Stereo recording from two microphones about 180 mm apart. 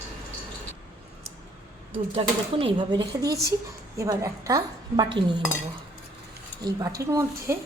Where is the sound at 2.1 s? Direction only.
30° right (ahead or behind).